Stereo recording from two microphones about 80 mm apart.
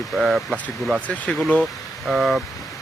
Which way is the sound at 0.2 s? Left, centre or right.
Centre.